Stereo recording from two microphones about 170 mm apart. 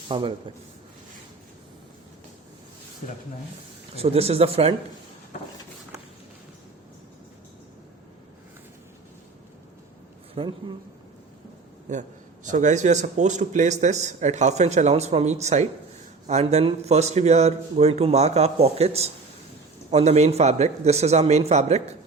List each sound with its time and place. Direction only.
0.1 s speech: 30° right (ahead or behind)
3.9 s a man's voice: 35° right (ahead or behind)
10.3 s a man's voice: 30° right (ahead or behind)
12.5 s a man's voice: 45° right (ahead or behind)